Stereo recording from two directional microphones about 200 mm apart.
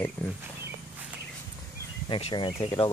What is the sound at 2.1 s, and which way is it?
Speech, 25° left (ahead or behind).